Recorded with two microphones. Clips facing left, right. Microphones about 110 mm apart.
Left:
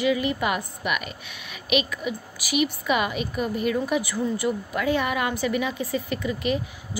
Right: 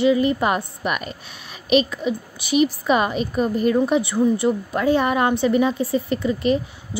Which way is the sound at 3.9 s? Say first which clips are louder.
Right 7 dB; 25° right (ahead or behind).